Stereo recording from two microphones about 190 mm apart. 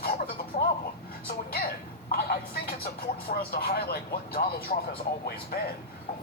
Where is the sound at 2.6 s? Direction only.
55° left (ahead or behind).